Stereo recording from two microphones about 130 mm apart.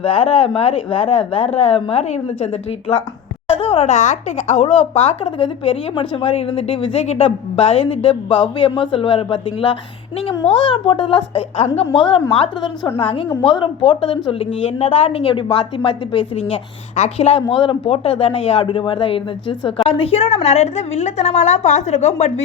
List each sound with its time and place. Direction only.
0.0 s a woman's voice: 45° left (ahead or behind)
11.3 s a woman's voice: 55° left (ahead or behind)
12.3 s a woman's voice: 40° left (ahead or behind); by 22.4 s 60° left (ahead or behind)